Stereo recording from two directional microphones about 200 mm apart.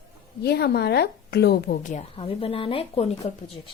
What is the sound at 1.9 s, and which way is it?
A woman's voice, 30° left (ahead or behind).